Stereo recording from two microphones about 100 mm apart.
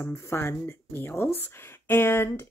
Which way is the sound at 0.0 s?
25° left (ahead or behind).